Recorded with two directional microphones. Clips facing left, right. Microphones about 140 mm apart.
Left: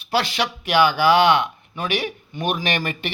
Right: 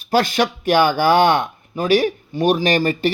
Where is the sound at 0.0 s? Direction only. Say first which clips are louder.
Right 5 dB; 45° right (ahead or behind).